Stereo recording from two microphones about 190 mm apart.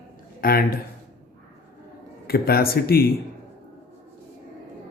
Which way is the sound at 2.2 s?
55° left (ahead or behind).